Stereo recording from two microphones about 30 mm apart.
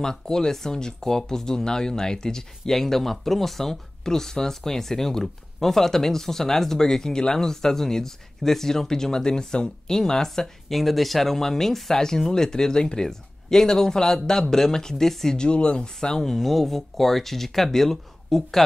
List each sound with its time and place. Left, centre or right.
0.0 s speech: centre
10.7 s speech: centre
15.3 s speech: left
16.2 s speech: centre